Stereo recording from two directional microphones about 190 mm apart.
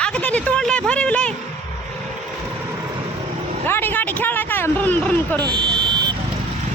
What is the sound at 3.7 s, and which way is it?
Speech, 10° left (ahead or behind).